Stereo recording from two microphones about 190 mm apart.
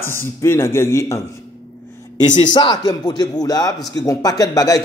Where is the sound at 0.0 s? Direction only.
15° left (ahead or behind).